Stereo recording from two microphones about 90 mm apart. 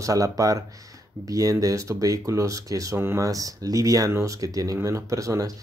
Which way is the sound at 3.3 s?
40° right (ahead or behind).